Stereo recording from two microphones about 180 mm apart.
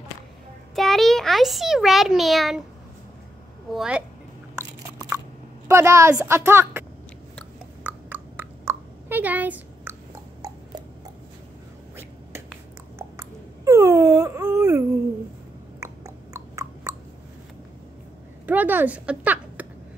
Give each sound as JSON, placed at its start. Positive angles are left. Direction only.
{"t": 0.7, "sound": "a child's voice", "side_deg": 0}
{"t": 3.7, "sound": "a woman's voice", "side_deg": -5}
{"t": 5.7, "sound": "a woman's voice", "side_deg": -15}
{"t": 7.8, "sound": "a sound", "side_deg": -10}
{"t": 13.2, "sound": "wail", "side_deg": -15}
{"t": 16.3, "sound": "a sound", "side_deg": -15}
{"t": 18.5, "sound": "speech", "side_deg": -10}